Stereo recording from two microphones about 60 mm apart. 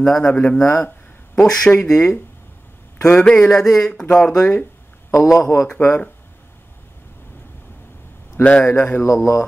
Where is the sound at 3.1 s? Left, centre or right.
Centre.